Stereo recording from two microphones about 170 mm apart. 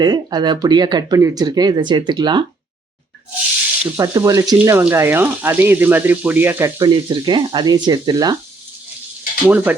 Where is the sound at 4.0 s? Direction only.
20° right (ahead or behind).